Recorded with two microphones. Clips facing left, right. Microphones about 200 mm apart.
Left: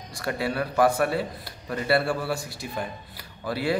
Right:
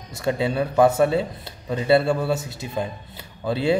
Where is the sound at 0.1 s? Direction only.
20° right (ahead or behind).